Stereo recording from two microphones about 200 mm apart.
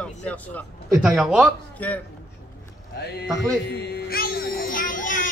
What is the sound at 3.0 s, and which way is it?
Music, 55° left (ahead or behind).